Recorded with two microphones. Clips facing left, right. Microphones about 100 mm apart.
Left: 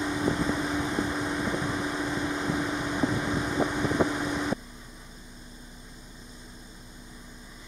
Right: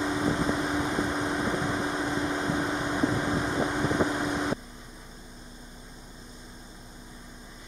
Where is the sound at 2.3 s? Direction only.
30° right (ahead or behind).